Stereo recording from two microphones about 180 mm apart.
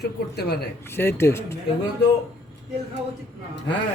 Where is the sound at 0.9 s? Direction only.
15° left (ahead or behind).